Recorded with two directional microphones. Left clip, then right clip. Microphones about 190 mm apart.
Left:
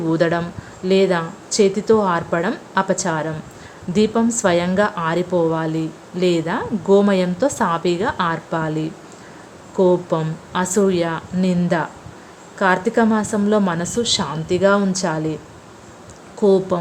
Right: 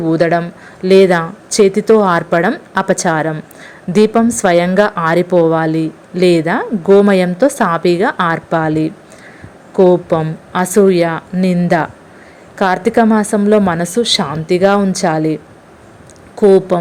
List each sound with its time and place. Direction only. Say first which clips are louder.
0.0 s a woman's voice: right 6 dB; 20° right (ahead or behind)